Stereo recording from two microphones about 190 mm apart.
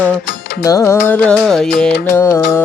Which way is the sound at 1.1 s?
5° left (ahead or behind).